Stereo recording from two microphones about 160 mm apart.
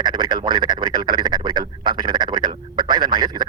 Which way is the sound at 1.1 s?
30° right (ahead or behind).